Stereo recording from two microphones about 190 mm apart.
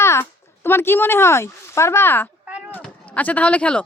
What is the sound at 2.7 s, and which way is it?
Speech, 5° left (ahead or behind).